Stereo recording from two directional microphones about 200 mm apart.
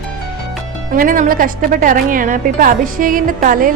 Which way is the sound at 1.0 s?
45° right (ahead or behind).